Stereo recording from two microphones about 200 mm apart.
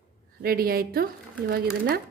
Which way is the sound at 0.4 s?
50° right (ahead or behind).